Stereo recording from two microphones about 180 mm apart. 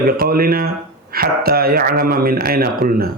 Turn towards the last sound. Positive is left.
turn(degrees=-55)  # may be behind; listen again after turning